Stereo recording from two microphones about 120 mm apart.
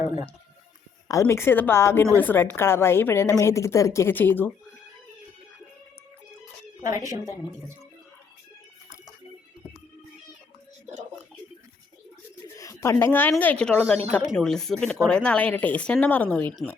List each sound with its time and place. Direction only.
1.0 s a woman's voice: 25° left (ahead or behind)
6.8 s speech: 25° right (ahead or behind)
12.5 s a woman's voice: 25° left (ahead or behind)